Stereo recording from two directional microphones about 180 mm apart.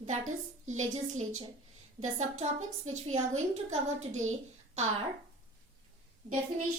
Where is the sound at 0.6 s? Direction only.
40° right (ahead or behind).